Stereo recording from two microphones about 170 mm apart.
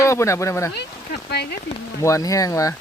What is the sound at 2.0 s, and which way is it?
Speech, 20° left (ahead or behind).